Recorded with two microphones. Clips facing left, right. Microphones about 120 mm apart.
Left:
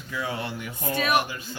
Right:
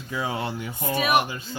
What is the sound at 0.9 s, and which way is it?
Speech, 10° right (ahead or behind).